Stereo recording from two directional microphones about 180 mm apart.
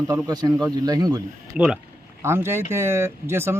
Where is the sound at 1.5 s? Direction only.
5° right (ahead or behind).